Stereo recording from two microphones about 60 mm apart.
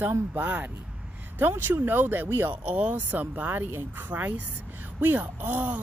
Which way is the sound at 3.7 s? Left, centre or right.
Right.